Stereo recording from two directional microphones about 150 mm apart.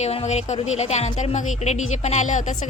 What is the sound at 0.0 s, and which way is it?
Speech, 45° left (ahead or behind).